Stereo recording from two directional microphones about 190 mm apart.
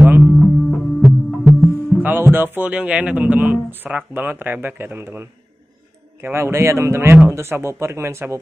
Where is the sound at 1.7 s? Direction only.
10° right (ahead or behind).